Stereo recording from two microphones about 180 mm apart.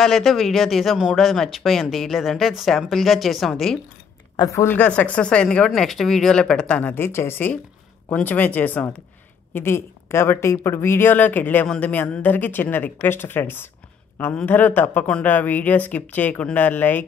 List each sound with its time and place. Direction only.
0.0 s speech: centre (ahead or behind)
4.4 s speech: 15° left (ahead or behind)